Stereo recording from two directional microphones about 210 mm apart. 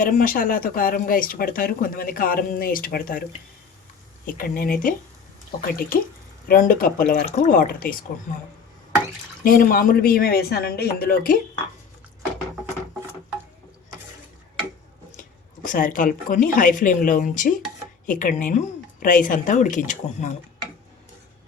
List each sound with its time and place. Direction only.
0.0 s speech: 40° left (ahead or behind)
4.3 s speech: 45° left (ahead or behind)
9.4 s speech: 40° left (ahead or behind)
15.6 s a woman's voice: 40° left (ahead or behind)